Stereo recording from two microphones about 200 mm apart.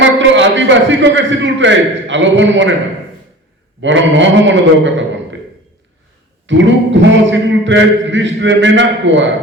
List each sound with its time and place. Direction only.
0.0 s a man's voice: 65° right (ahead or behind)
3.8 s a man's voice: 65° right (ahead or behind)
6.5 s a man's voice: 65° right (ahead or behind)